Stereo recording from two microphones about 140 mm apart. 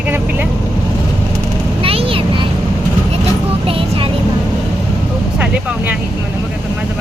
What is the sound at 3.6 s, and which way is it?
Vehicle, 40° right (ahead or behind).